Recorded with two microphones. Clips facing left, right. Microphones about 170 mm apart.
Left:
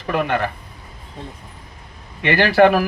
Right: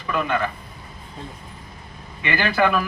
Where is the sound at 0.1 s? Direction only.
65° left (ahead or behind).